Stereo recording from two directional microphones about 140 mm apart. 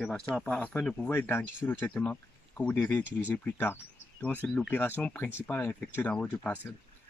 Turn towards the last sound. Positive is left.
turn(degrees=10)  # may be behind; listen again after turning